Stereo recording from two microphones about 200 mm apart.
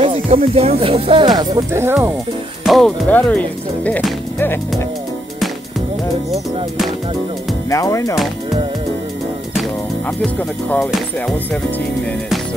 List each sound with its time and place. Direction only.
0.0 s speech: 30° right (ahead or behind); by 2.1 s 10° right (ahead or behind)
2.6 s speech: centre (ahead or behind)
7.7 s speech: 15° left (ahead or behind)
10.2 s music: 5° left (ahead or behind)